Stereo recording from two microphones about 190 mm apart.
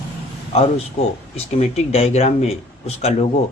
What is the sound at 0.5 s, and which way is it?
A man's voice, 30° left (ahead or behind).